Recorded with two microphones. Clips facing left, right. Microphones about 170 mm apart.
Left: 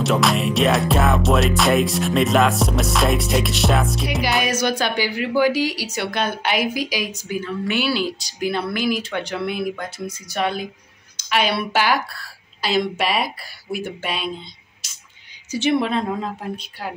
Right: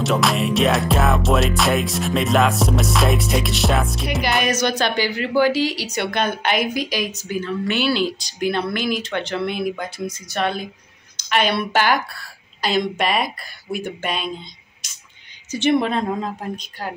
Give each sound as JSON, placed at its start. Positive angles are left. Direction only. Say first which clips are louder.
{"t": 0.0, "sound": "music", "louder": "even", "side_deg": 0}
{"t": 10.2, "sound": "a woman's voice", "louder": "left 1 dB", "side_deg": 10}
{"t": 15.5, "sound": "music", "louder": "right 1 dB", "side_deg": 5}